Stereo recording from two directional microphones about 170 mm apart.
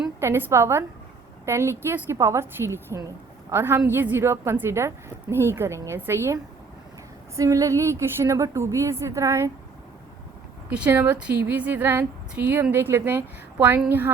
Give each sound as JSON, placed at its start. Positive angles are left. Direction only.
{"t": 0.2, "sound": "a woman's voice", "side_deg": -15}
{"t": 10.7, "sound": "a woman's voice", "side_deg": -10}